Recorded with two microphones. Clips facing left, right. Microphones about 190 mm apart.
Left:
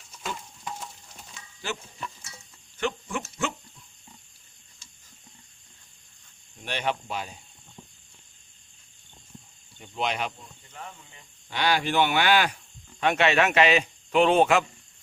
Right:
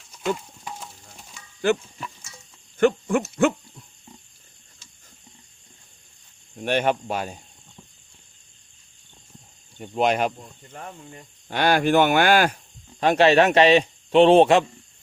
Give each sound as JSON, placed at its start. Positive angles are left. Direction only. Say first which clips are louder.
{"t": 0.6, "sound": "a sound", "louder": "even", "side_deg": -5}
{"t": 2.7, "sound": "speech", "louder": "right 11 dB", "side_deg": -55}
{"t": 6.6, "sound": "speech", "louder": "right 8 dB", "side_deg": -50}
{"t": 9.7, "sound": "speech", "louder": "right 8 dB", "side_deg": -50}
{"t": 13.0, "sound": "speech", "louder": "right 6 dB", "side_deg": -35}